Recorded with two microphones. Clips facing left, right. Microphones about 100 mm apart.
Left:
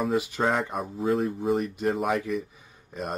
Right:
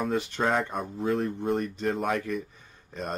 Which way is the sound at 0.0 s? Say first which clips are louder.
Left 2 dB; 5° left (ahead or behind).